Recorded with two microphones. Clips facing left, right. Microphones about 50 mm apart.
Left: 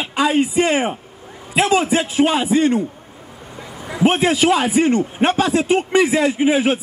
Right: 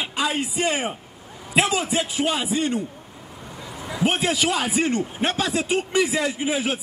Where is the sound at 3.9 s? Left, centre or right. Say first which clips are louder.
Left 6 dB; left.